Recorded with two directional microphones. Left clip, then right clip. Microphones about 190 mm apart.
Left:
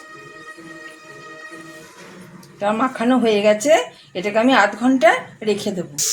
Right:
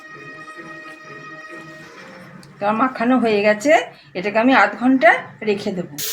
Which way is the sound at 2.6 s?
25° left (ahead or behind).